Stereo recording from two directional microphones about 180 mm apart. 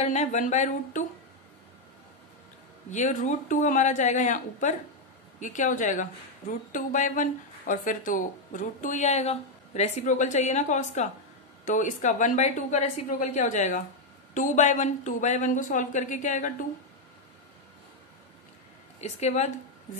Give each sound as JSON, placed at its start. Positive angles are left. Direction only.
{"t": 0.0, "sound": "speech", "side_deg": 40}
{"t": 2.9, "sound": "a woman's voice", "side_deg": 45}
{"t": 18.9, "sound": "speech", "side_deg": 40}